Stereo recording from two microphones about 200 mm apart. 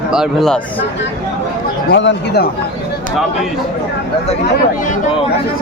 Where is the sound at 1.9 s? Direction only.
65° left (ahead or behind).